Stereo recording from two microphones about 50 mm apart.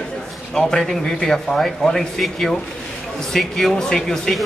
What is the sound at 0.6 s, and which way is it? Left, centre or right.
A man's voice, centre.